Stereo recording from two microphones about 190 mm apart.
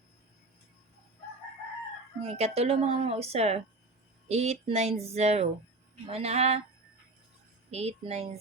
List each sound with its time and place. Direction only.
2.2 s speech: 35° right (ahead or behind)
7.7 s speech: 35° right (ahead or behind)